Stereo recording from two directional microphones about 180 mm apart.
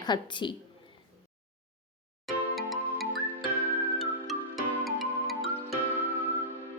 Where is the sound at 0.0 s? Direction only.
25° left (ahead or behind).